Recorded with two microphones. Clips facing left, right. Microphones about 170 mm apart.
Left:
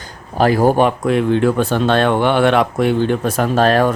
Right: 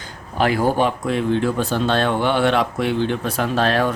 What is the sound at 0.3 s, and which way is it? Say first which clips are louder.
Speech: left 5 dB; 40° left (ahead or behind).